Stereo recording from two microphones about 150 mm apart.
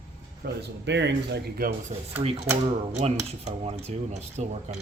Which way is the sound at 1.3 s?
75° right (ahead or behind).